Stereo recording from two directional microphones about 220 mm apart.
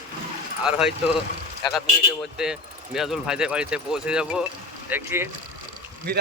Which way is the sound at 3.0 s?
Centre (ahead or behind).